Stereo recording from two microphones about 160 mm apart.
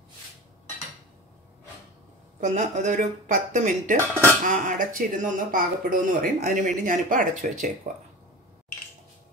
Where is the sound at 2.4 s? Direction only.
50° right (ahead or behind).